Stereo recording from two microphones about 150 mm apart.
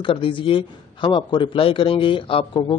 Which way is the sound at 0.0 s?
35° left (ahead or behind).